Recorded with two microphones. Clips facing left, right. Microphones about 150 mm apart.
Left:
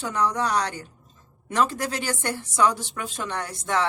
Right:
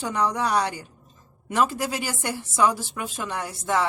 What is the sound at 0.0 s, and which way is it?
A woman's voice, 15° right (ahead or behind).